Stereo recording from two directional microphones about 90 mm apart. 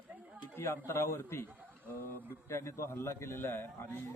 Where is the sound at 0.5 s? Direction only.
30° left (ahead or behind).